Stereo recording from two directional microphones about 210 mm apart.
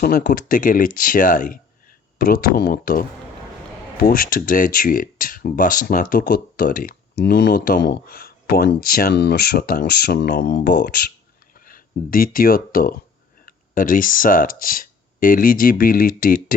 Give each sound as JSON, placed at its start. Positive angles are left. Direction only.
{"t": 0.0, "sound": "speech", "side_deg": 45}